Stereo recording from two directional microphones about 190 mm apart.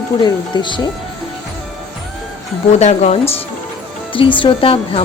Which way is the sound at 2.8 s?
35° left (ahead or behind).